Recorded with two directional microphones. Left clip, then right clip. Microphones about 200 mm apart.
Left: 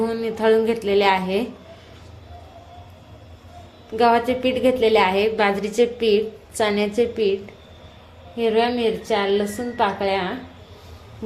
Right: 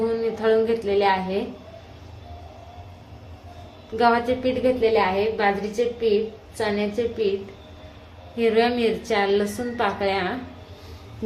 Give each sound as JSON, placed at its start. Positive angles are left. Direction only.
{"t": 0.1, "sound": "speech", "side_deg": 30}
{"t": 3.9, "sound": "a woman's voice", "side_deg": 25}
{"t": 8.4, "sound": "a woman's voice", "side_deg": 15}